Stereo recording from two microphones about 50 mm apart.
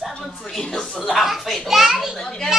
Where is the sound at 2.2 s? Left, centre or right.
Centre.